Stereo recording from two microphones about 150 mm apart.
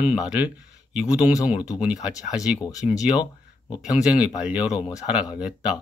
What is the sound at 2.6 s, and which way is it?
Speech, 25° left (ahead or behind).